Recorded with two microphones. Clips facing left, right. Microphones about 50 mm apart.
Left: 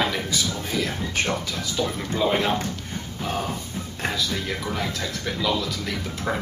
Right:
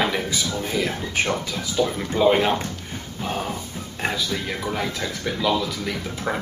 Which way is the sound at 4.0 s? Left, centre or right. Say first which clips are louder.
Right 2 dB; centre.